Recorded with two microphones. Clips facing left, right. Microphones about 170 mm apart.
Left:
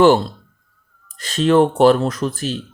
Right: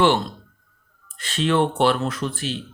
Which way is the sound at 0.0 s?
40° left (ahead or behind).